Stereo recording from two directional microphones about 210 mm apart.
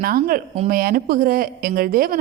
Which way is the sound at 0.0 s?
45° right (ahead or behind).